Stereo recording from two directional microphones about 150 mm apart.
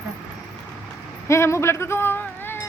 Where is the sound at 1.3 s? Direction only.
20° left (ahead or behind).